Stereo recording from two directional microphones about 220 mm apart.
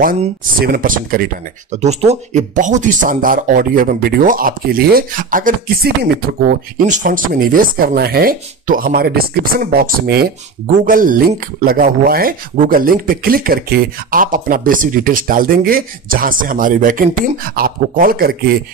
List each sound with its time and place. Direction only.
0.0 s speech: 40° right (ahead or behind)